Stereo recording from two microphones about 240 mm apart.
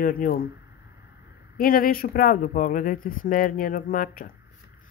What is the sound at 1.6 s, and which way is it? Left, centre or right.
Speech, left.